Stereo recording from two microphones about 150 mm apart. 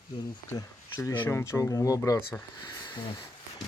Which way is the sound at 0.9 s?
20° left (ahead or behind).